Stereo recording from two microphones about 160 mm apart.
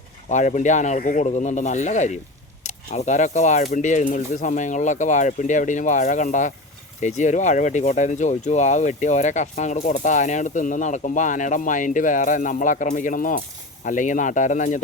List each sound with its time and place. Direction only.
0.3 s speech: 50° left (ahead or behind)